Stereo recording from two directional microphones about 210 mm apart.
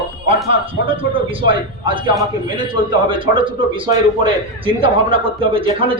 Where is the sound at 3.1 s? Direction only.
25° right (ahead or behind).